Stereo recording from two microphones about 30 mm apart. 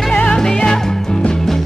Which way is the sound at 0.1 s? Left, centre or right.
Left.